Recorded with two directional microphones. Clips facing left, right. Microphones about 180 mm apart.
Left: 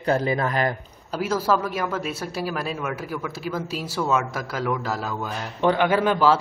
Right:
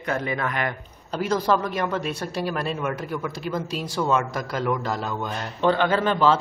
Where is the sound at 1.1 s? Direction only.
5° left (ahead or behind).